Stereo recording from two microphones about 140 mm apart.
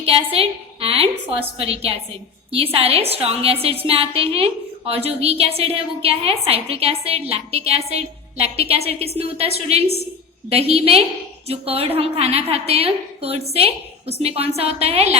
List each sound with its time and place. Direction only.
0.0 s a woman's voice: 45° right (ahead or behind)